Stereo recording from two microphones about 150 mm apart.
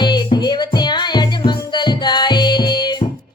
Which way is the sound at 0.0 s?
30° left (ahead or behind).